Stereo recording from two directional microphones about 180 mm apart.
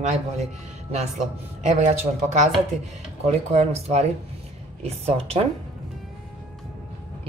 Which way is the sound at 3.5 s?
35° right (ahead or behind).